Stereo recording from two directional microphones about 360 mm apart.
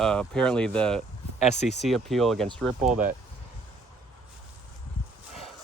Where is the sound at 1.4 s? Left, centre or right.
Centre.